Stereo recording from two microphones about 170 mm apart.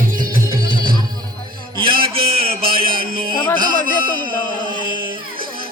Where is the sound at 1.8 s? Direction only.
30° right (ahead or behind).